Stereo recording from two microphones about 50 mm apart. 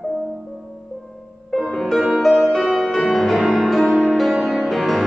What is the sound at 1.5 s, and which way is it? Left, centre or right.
Music, centre.